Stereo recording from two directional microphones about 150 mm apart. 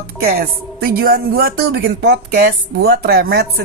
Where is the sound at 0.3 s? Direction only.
90° right.